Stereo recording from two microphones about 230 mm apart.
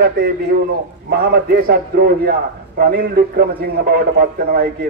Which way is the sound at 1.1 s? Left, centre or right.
Right.